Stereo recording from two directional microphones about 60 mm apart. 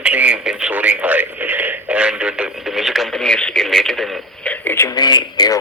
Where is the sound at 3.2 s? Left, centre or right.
Centre.